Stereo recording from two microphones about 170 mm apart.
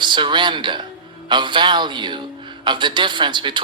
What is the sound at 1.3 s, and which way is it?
A man's voice, 25° right (ahead or behind).